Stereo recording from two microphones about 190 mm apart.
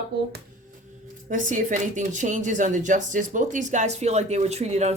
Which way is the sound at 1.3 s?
40° right (ahead or behind).